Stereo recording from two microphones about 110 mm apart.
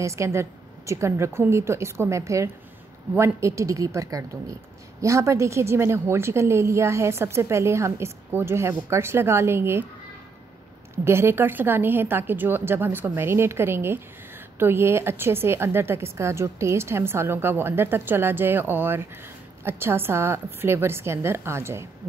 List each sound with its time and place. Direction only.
0.0 s a woman's voice: 25° right (ahead or behind)
11.1 s a woman's voice: 20° right (ahead or behind)